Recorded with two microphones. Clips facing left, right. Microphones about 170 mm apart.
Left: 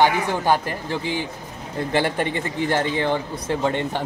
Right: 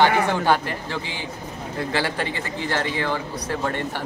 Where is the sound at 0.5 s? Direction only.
15° left (ahead or behind).